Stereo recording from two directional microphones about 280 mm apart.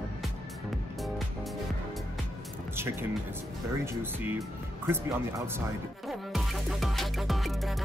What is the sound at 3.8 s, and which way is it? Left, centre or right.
Speech, centre.